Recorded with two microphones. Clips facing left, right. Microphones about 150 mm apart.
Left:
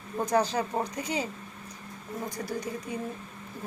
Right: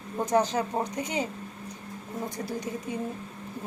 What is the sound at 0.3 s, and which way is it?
Speech, 20° right (ahead or behind).